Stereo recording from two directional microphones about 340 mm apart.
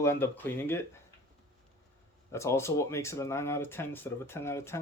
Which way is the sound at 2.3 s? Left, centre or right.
Centre.